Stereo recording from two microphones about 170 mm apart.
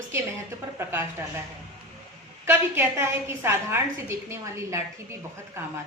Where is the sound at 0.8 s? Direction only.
15° right (ahead or behind).